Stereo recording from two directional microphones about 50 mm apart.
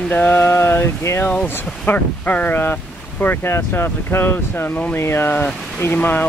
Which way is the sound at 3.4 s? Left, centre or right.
Left.